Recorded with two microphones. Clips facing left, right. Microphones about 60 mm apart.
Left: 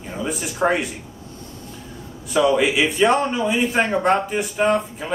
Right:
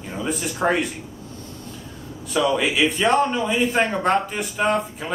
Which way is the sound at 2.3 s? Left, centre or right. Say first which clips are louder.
Left 3 dB; centre.